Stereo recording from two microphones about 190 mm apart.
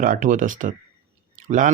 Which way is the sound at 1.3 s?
40° right (ahead or behind).